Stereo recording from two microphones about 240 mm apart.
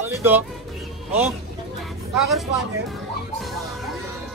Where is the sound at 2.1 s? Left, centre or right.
Centre.